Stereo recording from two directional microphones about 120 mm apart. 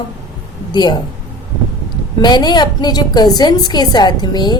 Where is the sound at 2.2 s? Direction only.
35° left (ahead or behind).